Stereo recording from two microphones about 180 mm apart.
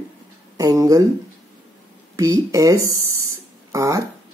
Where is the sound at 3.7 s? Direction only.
20° right (ahead or behind).